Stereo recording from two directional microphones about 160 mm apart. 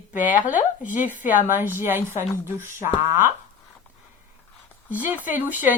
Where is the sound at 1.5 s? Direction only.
15° right (ahead or behind).